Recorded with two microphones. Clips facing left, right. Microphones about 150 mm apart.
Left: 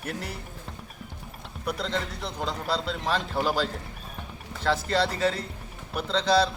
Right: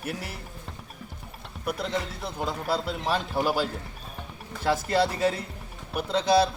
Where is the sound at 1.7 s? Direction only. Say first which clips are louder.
Even; 10° right (ahead or behind).